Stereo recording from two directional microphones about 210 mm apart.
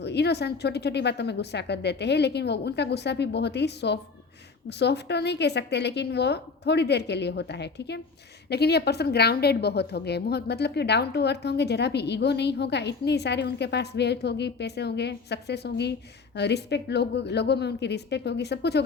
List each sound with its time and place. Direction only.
0.0 s a woman's voice: 55° left (ahead or behind)